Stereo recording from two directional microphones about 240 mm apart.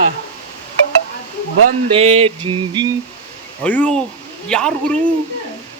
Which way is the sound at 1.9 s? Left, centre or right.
Right.